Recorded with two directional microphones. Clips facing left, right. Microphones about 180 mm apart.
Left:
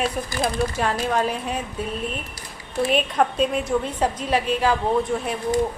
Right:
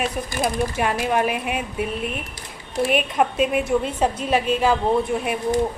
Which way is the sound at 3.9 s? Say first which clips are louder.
Right 2 dB; 25° right (ahead or behind).